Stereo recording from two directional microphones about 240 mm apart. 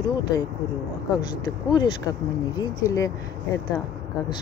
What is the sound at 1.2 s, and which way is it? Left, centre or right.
Speech, centre.